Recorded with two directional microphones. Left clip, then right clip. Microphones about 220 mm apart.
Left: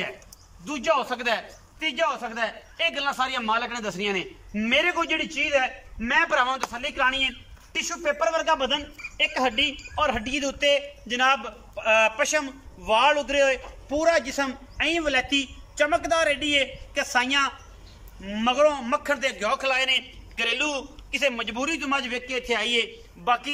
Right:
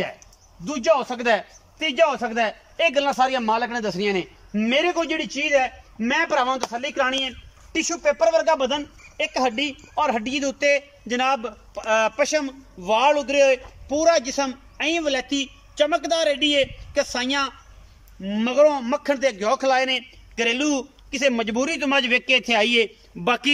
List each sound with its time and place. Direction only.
0.7 s a man's voice: 30° right (ahead or behind)
7.7 s a man's voice: 15° right (ahead or behind); by 23.5 s 50° right (ahead or behind)